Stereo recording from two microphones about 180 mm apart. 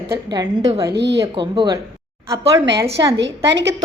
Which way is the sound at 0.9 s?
70° right (ahead or behind).